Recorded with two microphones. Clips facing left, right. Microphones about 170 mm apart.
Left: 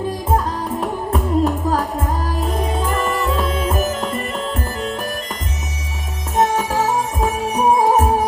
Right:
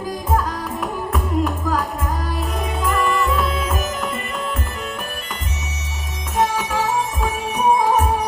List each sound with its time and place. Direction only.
0.0 s music: 30° left (ahead or behind)
6.3 s music: 35° left (ahead or behind)